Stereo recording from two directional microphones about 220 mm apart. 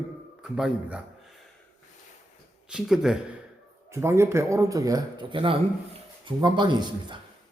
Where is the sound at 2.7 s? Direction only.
Centre (ahead or behind).